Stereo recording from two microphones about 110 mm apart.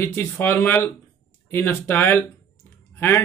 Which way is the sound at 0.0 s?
20° left (ahead or behind).